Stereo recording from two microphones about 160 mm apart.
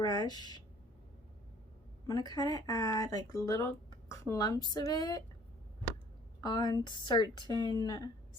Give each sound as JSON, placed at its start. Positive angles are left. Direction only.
{"t": 0.0, "sound": "speech", "side_deg": 25}
{"t": 2.0, "sound": "speech", "side_deg": 25}
{"t": 6.4, "sound": "speech", "side_deg": 25}